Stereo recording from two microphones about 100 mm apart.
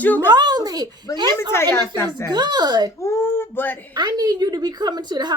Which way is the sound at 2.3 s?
45° right (ahead or behind).